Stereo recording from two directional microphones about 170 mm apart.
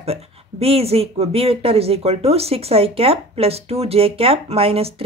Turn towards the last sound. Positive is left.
turn(degrees=-35)  # may be behind; listen again after turning